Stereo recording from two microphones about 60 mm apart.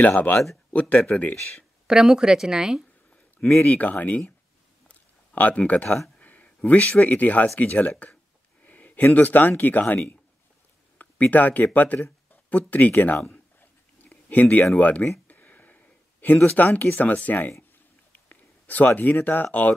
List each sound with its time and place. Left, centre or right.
0.0 s speech: left
1.9 s a woman's voice: centre
3.6 s speech: left
4.8 s a sound: left
5.7 s speech: left
11.0 s speech: left
13.6 s a sound: left
14.8 s speech: left
15.2 s a sound: left
16.5 s speech: left
18.3 s a sound: left
19.2 s speech: left